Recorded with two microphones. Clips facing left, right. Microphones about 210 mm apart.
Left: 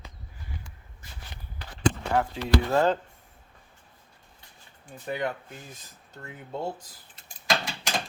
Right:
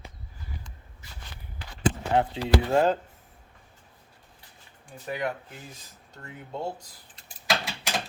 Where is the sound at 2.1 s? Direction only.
25° right (ahead or behind).